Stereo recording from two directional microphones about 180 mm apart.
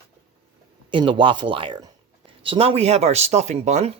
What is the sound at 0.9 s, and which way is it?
Speech, 25° right (ahead or behind).